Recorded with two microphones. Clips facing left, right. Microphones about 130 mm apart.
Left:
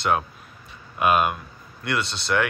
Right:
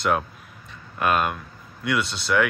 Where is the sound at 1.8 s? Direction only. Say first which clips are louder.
Right 2 dB; 5° right (ahead or behind).